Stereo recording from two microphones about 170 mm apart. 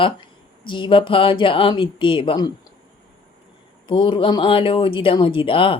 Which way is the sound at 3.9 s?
30° left (ahead or behind).